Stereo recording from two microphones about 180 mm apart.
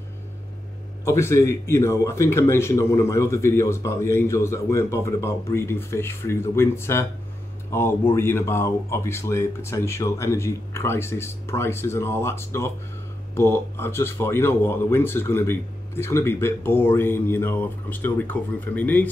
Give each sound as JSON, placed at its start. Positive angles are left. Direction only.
{"t": 1.0, "sound": "a man's voice", "side_deg": 15}